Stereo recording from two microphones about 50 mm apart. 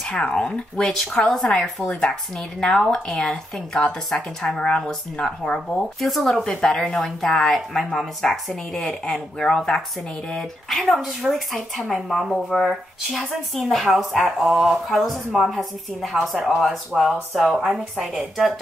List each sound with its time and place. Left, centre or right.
0.0 s speech: centre
0.8 s speech: centre
6.0 s speech: centre
6.4 s speech: centre
10.3 s speech: centre